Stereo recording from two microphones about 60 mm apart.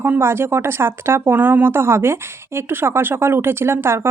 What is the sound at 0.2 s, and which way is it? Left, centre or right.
Speech, right.